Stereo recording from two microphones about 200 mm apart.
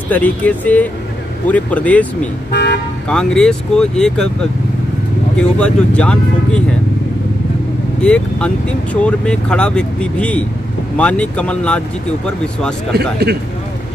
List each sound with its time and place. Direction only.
0.1 s speech: 10° left (ahead or behind)
3.1 s speech: 5° left (ahead or behind)
8.0 s speech: 5° left (ahead or behind)
12.9 s speech: 55° right (ahead or behind)